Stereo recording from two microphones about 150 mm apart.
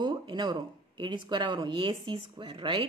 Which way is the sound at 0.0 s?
30° right (ahead or behind).